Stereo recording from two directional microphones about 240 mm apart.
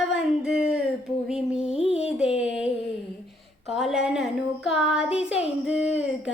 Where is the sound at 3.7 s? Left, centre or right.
Centre.